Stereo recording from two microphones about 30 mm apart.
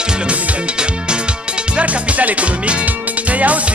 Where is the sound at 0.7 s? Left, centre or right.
Right.